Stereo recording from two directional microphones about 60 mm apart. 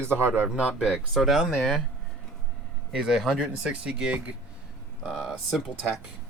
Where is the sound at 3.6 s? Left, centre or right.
Centre.